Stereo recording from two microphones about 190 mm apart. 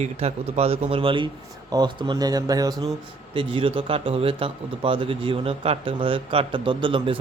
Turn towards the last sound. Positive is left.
turn(degrees=-25)  # may be behind; listen again after turning